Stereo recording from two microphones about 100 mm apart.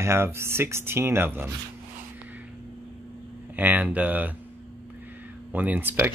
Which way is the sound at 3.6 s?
20° right (ahead or behind).